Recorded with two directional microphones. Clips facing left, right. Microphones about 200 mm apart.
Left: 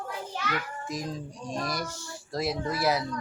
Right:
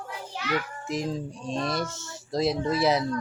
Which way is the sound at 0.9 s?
25° right (ahead or behind).